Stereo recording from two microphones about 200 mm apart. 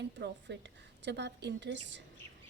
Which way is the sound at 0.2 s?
60° right (ahead or behind).